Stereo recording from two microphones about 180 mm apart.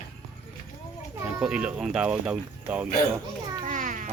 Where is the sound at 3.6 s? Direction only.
45° right (ahead or behind).